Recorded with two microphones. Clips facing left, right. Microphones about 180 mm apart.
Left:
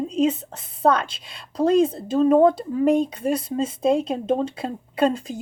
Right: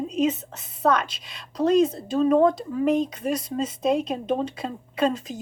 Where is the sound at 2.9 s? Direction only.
30° left (ahead or behind).